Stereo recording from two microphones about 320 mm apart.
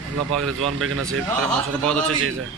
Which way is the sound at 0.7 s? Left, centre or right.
Right.